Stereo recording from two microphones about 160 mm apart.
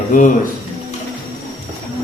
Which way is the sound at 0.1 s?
55° left (ahead or behind).